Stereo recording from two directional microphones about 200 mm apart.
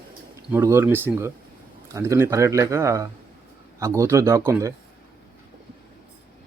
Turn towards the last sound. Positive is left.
turn(degrees=-15)  # may be behind; listen again after turning